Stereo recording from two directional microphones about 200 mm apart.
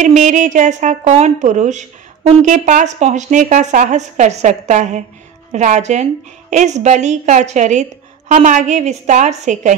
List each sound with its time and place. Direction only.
0.0 s speech: 40° right (ahead or behind)